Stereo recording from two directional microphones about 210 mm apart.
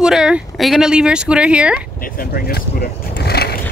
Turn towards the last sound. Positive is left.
turn(degrees=50)  # may be behind; listen again after turning